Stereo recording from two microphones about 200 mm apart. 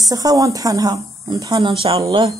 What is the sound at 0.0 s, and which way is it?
Speech, 20° right (ahead or behind).